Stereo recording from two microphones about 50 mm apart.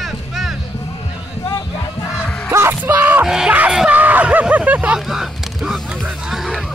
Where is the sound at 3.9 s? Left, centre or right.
Right.